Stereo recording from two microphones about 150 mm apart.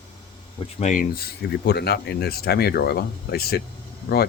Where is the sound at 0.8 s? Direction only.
60° left (ahead or behind).